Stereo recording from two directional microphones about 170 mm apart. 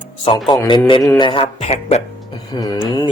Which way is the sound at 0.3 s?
25° left (ahead or behind).